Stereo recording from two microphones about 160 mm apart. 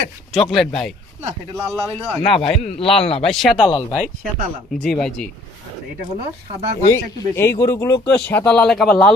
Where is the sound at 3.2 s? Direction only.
Centre (ahead or behind).